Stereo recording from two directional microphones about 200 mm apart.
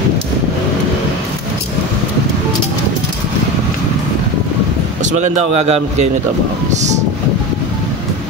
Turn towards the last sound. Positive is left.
turn(degrees=-35)  # may be behind; listen again after turning